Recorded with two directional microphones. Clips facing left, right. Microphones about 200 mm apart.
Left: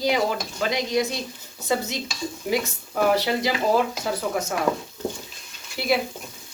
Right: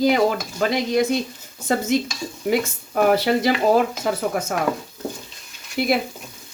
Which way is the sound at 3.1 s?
55° right (ahead or behind).